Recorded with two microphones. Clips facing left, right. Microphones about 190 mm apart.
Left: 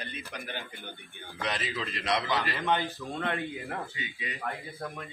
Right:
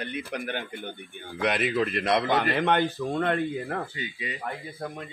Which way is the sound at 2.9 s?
55° right (ahead or behind).